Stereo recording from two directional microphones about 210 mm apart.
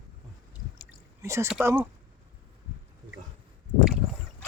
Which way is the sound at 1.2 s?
10° right (ahead or behind).